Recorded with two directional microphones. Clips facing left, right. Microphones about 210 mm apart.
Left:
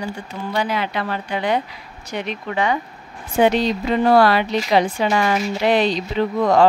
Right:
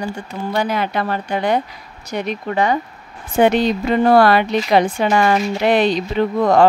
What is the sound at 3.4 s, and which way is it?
Speech, 55° right (ahead or behind).